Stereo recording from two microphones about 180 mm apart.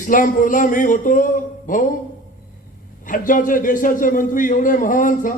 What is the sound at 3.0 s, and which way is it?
A man's voice, 50° left (ahead or behind).